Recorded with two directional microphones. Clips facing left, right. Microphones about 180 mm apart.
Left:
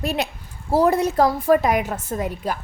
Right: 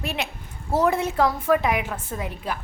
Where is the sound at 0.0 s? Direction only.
40° left (ahead or behind).